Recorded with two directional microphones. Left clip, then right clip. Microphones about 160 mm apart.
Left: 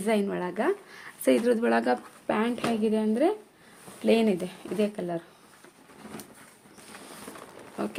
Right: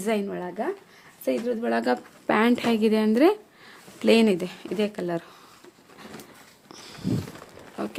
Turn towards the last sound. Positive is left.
turn(degrees=-10)  # may be behind; listen again after turning